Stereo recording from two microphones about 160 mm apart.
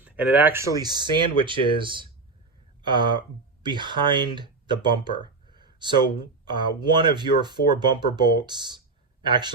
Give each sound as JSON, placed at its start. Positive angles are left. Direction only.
{"t": 0.0, "sound": "speech", "side_deg": -10}